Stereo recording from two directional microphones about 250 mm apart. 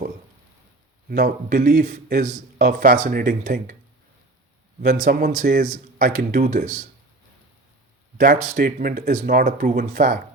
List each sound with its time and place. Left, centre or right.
1.1 s speech: right
5.0 s speech: right
8.2 s speech: right